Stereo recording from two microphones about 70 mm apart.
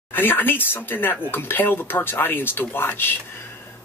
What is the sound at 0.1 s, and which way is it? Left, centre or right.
Speech, left.